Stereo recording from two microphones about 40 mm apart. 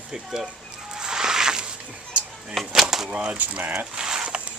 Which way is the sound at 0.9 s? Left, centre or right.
Centre.